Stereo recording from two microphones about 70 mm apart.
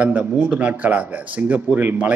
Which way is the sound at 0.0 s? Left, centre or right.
Centre.